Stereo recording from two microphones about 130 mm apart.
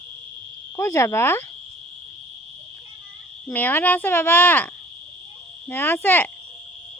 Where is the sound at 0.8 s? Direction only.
20° left (ahead or behind).